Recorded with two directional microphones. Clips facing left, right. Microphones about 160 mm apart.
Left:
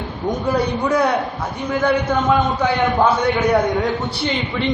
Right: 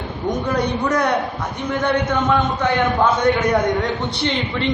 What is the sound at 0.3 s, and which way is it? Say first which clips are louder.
A man's voice: left 1 dB; 10° left (ahead or behind).